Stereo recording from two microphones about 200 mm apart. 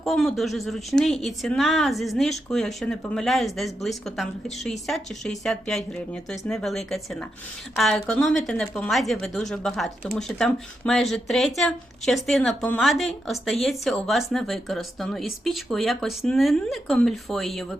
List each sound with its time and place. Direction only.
0.0 s speech: centre (ahead or behind)